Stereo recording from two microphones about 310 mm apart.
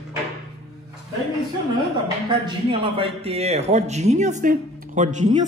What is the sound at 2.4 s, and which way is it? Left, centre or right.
A man's voice, centre.